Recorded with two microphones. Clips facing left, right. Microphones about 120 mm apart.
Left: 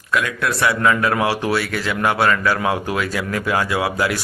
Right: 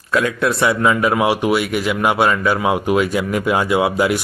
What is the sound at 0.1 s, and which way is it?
A man's voice, 30° right (ahead or behind).